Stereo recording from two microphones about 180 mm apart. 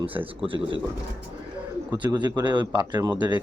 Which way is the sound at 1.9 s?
25° right (ahead or behind).